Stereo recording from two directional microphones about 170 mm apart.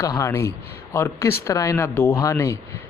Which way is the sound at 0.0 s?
20° left (ahead or behind).